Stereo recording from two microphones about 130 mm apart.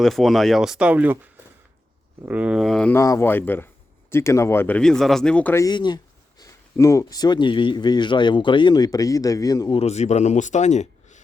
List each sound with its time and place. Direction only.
0.0 s speech: centre (ahead or behind)
2.2 s speech: 10° right (ahead or behind)
2.9 s speech: 20° left (ahead or behind)
5.5 s speech: 35° left (ahead or behind)
6.4 s speech: 25° left (ahead or behind)
9.7 s speech: 55° left (ahead or behind)